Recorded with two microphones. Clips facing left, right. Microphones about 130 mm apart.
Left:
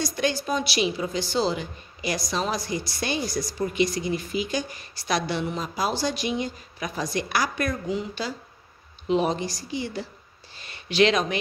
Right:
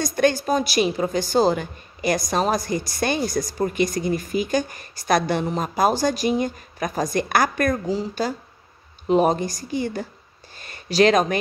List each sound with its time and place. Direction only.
0.0 s a woman's voice: 50° right (ahead or behind)
7.8 s a woman's voice: 35° right (ahead or behind)